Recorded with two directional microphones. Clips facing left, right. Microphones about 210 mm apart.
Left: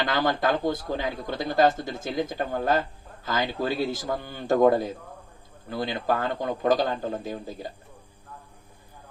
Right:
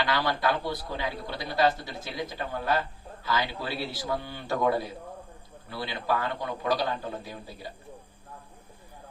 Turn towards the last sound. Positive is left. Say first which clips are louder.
# left 6 dB
turn(degrees=50)  # may be behind; listen again after turning